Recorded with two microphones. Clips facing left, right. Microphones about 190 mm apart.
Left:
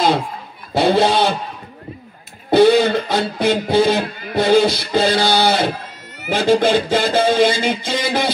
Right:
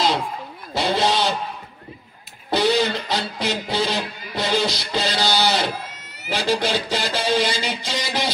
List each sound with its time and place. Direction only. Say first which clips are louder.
0.7 s music: left 6 dB; 55° left (ahead or behind)
2.5 s music: left 8 dB; 55° left (ahead or behind)